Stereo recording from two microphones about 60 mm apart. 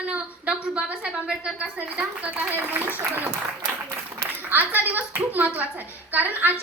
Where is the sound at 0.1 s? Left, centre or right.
Centre.